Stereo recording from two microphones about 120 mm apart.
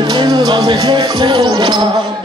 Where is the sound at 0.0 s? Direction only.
35° right (ahead or behind).